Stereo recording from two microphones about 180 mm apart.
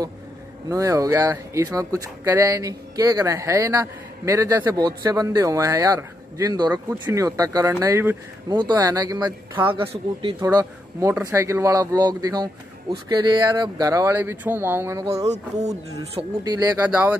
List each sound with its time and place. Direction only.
0.7 s speech: 20° right (ahead or behind)
15.2 s speech: 40° right (ahead or behind)
16.2 s speech: 20° right (ahead or behind)
16.8 s speech: 5° right (ahead or behind)